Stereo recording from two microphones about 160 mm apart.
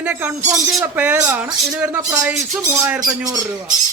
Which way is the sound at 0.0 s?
10° right (ahead or behind).